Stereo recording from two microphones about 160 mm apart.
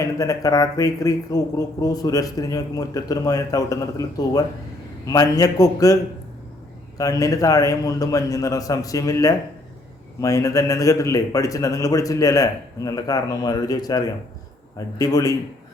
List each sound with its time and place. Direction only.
0.0 s speech: 20° left (ahead or behind)